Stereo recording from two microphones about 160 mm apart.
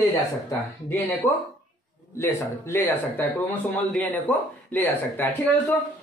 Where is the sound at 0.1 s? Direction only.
15° left (ahead or behind).